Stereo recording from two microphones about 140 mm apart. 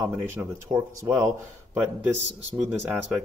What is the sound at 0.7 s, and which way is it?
Speech, 35° right (ahead or behind).